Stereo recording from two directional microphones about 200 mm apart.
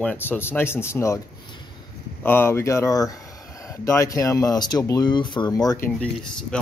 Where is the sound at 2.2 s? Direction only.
10° left (ahead or behind).